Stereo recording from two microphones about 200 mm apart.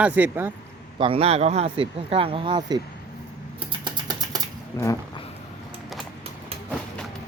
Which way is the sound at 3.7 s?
20° right (ahead or behind).